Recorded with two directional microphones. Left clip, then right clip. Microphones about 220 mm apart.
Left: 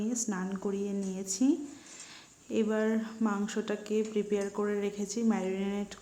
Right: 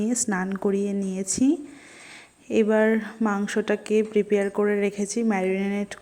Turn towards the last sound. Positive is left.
turn(degrees=-20)  # may be behind; listen again after turning